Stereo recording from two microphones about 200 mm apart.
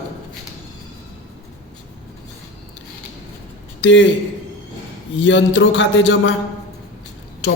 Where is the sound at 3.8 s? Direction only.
70° left (ahead or behind).